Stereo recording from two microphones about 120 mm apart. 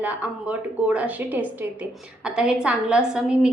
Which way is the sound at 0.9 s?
10° right (ahead or behind).